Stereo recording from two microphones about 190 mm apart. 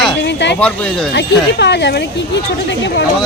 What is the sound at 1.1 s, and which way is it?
Speech, 65° left (ahead or behind).